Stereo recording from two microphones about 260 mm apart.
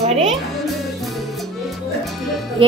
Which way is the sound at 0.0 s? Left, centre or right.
Right.